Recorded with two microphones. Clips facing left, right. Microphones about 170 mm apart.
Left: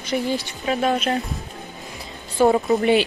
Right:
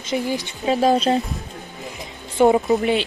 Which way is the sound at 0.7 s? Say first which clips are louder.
Right 4 dB; 35° right (ahead or behind).